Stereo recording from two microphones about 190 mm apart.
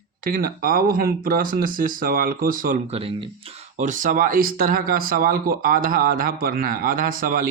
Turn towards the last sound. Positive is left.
turn(degrees=-45)  # may be behind; listen again after turning